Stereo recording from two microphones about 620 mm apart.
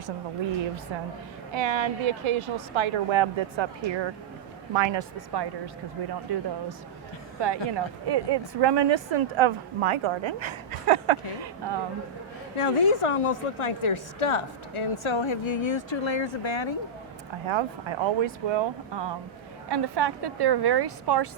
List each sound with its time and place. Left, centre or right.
1.5 s a woman's voice: right
12.5 s a woman's voice: left
17.5 s a woman's voice: right